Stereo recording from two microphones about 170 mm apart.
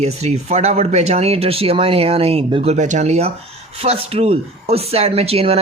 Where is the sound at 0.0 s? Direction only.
40° right (ahead or behind).